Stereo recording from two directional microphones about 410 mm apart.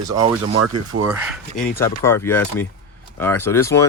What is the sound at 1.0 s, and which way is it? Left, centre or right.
Speech, centre.